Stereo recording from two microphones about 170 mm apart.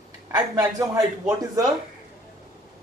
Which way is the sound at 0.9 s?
20° right (ahead or behind).